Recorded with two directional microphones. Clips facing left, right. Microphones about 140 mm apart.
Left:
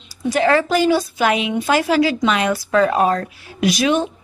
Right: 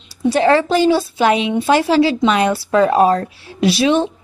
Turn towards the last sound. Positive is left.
turn(degrees=-30)  # may be behind; listen again after turning